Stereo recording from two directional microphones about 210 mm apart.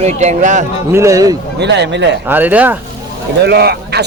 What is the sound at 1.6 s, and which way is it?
Speech, 55° right (ahead or behind).